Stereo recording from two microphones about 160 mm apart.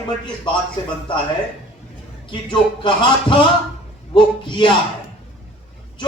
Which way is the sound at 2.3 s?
30° left (ahead or behind).